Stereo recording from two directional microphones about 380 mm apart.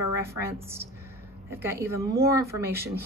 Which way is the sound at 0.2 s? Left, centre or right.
Centre.